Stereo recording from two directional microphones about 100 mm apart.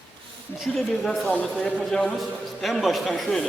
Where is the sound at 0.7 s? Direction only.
Centre (ahead or behind).